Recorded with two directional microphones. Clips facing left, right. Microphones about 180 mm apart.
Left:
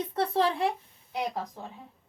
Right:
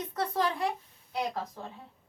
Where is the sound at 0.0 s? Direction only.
30° left (ahead or behind).